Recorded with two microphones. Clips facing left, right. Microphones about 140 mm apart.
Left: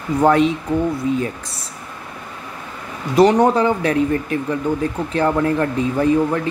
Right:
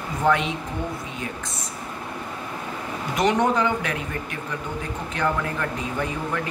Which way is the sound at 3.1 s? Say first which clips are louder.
Left 8 dB; 35° left (ahead or behind).